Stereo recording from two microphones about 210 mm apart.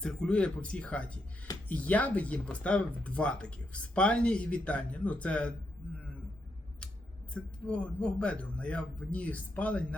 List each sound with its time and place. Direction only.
0.0 s speech: 5° left (ahead or behind)
7.7 s speech: 5° left (ahead or behind)